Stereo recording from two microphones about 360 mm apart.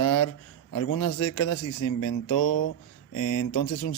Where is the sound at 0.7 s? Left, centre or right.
Left.